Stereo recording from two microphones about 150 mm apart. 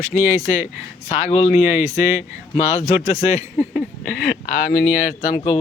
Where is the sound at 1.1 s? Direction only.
40° left (ahead or behind).